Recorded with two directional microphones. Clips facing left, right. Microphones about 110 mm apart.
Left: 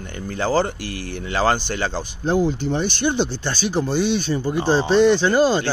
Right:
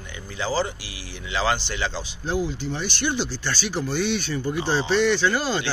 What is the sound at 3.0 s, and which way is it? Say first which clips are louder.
Speech: left 5 dB; 20° left (ahead or behind).